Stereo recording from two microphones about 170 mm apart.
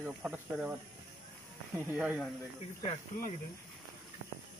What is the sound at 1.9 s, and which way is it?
Speech, 5° right (ahead or behind).